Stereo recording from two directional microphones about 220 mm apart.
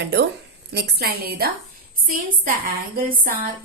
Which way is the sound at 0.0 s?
50° right (ahead or behind).